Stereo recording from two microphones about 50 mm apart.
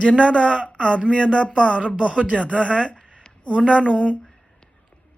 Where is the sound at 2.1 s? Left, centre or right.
Right.